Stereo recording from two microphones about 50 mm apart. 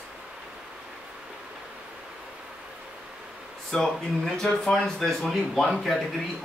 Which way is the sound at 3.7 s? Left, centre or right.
Centre.